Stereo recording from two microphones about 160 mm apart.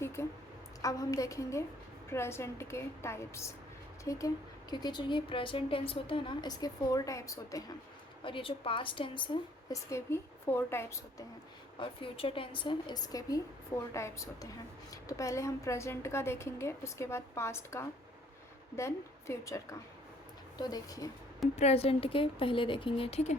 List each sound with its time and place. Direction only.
0.0 s a sound: 15° left (ahead or behind)
0.8 s a woman's voice: 20° left (ahead or behind)
8.2 s a woman's voice: 35° left (ahead or behind)
9.9 s a woman's voice: 15° left (ahead or behind)
11.8 s a woman's voice: 35° left (ahead or behind)
21.5 s a woman's voice: 40° left (ahead or behind)